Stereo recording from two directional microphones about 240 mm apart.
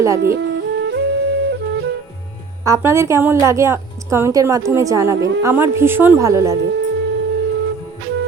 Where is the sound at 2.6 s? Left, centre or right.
Centre.